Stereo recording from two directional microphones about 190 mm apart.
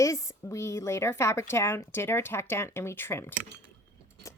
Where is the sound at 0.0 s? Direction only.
15° left (ahead or behind).